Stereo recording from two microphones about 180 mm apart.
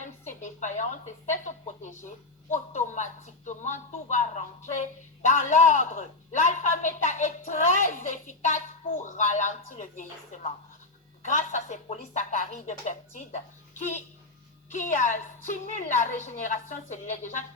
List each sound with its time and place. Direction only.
0.0 s a woman's voice: 40° left (ahead or behind)